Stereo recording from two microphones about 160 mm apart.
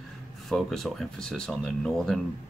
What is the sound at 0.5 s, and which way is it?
Speech, centre (ahead or behind).